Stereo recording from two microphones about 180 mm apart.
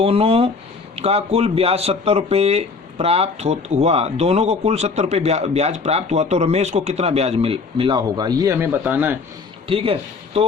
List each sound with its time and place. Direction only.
0.0 s speech: 30° right (ahead or behind); by 9.1 s 10° right (ahead or behind)
9.6 s a man's voice: 30° right (ahead or behind)